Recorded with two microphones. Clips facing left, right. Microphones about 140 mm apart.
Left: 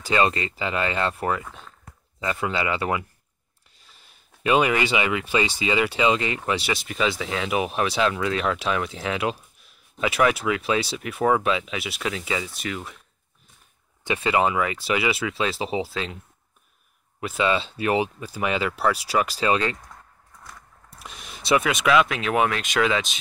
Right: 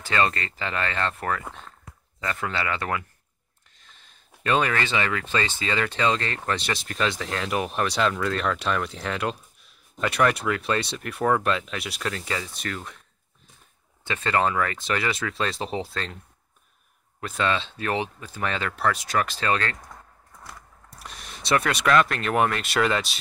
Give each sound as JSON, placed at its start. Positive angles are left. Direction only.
{"t": 0.0, "sound": "speech", "side_deg": 15}
{"t": 14.0, "sound": "speech", "side_deg": 10}
{"t": 17.2, "sound": "speech", "side_deg": 5}
{"t": 21.0, "sound": "speech", "side_deg": 5}